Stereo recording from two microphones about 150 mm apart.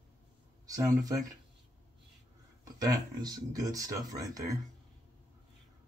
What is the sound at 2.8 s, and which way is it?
Speech, 25° right (ahead or behind).